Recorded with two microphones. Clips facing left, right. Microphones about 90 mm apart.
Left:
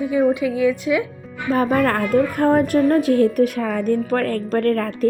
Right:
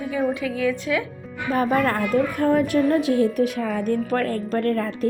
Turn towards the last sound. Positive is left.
turn(degrees=55)  # may be behind; listen again after turning